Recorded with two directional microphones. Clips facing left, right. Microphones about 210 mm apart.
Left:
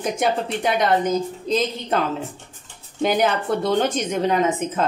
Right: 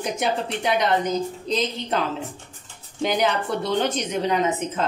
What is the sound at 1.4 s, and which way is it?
Speech, 50° left (ahead or behind).